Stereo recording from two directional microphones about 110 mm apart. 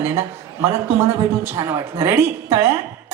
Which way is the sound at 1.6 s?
30° right (ahead or behind).